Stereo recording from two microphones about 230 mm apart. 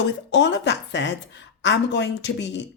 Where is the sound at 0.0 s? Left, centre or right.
Left.